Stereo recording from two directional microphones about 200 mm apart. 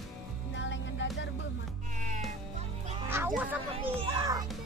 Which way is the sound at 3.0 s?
10° right (ahead or behind).